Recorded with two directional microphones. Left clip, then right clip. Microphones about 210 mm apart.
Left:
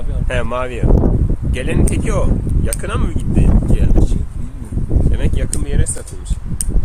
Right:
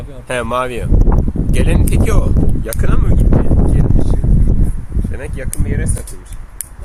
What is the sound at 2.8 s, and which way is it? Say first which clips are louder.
Speech: right 2 dB; 15° right (ahead or behind).